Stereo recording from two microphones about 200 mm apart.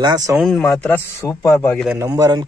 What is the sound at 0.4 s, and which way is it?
A man's voice, centre (ahead or behind).